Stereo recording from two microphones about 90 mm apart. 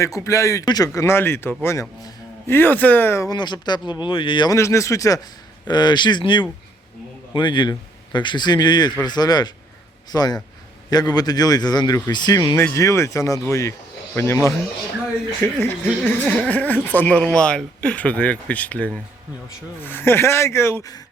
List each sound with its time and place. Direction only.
0.0 s speech: 35° left (ahead or behind)
1.0 s speech: 25° left (ahead or behind)
3.2 s speech: 55° left (ahead or behind)
4.5 s speech: 35° left (ahead or behind)
5.6 s a man's voice: 55° left (ahead or behind)
12.7 s speech: 35° left (ahead or behind)
15.6 s speech: 25° left (ahead or behind)
16.2 s speech: 15° left (ahead or behind)